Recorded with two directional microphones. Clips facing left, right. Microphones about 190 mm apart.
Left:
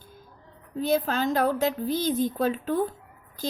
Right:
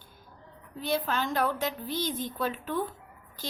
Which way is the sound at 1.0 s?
40° left (ahead or behind).